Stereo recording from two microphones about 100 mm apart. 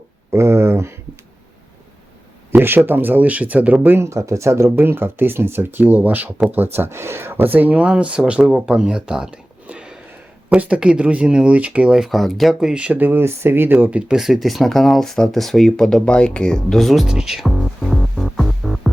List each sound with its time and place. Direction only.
0.3 s speech: 25° right (ahead or behind)
2.5 s speech: 20° right (ahead or behind); by 18.9 s centre (ahead or behind)